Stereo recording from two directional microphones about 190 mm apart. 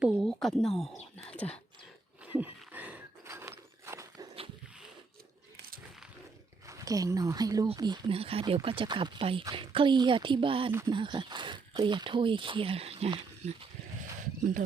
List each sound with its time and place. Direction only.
0.0 s a sound: centre (ahead or behind)
1.3 s whispering: 5° left (ahead or behind)
2.2 s horse: 10° right (ahead or behind)
6.7 s speech: 20° right (ahead or behind)
10.7 s speech: 15° right (ahead or behind)
10.9 s speech: 25° right (ahead or behind)
14.2 s a sound: 45° right (ahead or behind)